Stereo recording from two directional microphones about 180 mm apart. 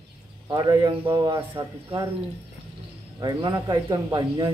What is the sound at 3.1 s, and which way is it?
Speech, 20° right (ahead or behind).